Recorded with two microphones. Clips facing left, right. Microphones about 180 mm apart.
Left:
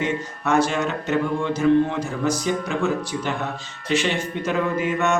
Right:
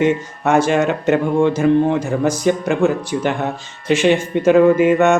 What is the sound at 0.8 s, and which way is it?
Speech, 90° right.